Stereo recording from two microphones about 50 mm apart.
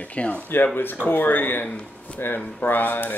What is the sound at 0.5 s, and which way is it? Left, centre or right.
Speech, left.